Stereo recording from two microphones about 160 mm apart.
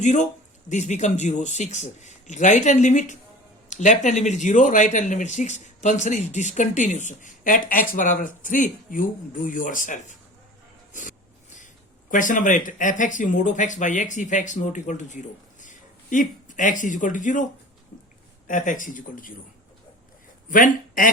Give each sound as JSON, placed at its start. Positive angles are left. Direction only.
{"t": 0.0, "sound": "speech", "side_deg": 50}
{"t": 12.1, "sound": "speech", "side_deg": 55}
{"t": 18.4, "sound": "speech", "side_deg": 55}
{"t": 20.5, "sound": "a man's voice", "side_deg": 60}